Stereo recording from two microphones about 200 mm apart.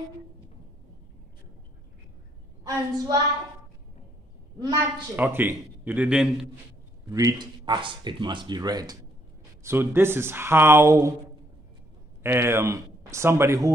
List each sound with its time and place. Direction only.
2.6 s speech: 15° right (ahead or behind)
5.1 s a man's voice: 10° right (ahead or behind)
7.1 s speech: 15° right (ahead or behind)
12.2 s speech: 10° right (ahead or behind)